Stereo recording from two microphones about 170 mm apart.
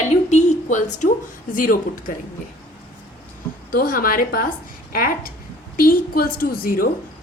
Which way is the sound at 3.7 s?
55° left (ahead or behind).